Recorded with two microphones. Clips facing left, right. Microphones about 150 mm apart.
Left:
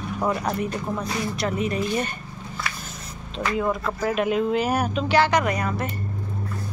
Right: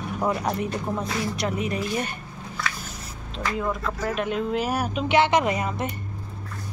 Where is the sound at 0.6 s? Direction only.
20° right (ahead or behind).